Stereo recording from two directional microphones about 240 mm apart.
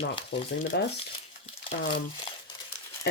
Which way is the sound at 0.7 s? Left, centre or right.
Left.